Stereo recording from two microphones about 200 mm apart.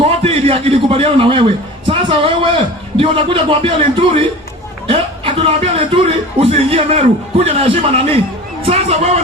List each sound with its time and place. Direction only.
0.0 s a man's voice: 30° right (ahead or behind)